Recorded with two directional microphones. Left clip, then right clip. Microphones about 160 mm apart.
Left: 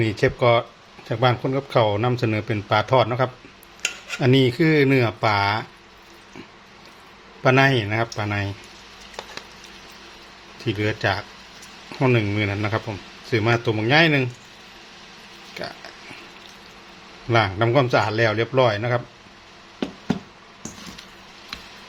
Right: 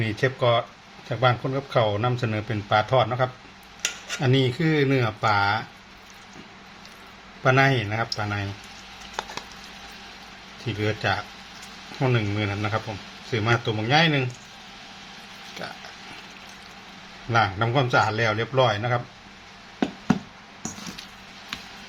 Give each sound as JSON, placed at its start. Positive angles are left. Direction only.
{"t": 0.0, "sound": "speech", "side_deg": 40}
{"t": 7.4, "sound": "speech", "side_deg": 45}
{"t": 10.7, "sound": "speech", "side_deg": 45}
{"t": 17.3, "sound": "speech", "side_deg": 45}